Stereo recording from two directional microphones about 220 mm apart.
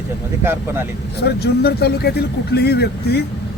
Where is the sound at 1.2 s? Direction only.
45° left (ahead or behind).